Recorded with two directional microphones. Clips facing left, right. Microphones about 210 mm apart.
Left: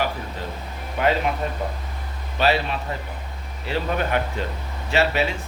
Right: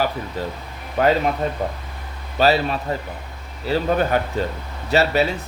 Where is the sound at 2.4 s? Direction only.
40° right (ahead or behind).